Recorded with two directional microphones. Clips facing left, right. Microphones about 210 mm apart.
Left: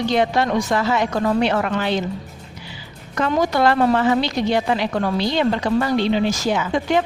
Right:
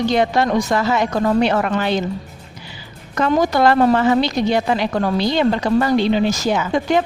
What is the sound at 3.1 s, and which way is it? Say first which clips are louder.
A woman's voice: right 3 dB; 40° right (ahead or behind).